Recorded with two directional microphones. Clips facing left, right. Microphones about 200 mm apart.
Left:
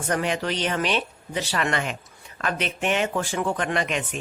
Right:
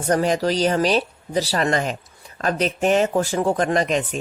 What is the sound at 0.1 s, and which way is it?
A man's voice, 40° right (ahead or behind).